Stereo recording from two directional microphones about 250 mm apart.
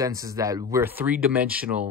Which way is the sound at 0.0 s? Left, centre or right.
Centre.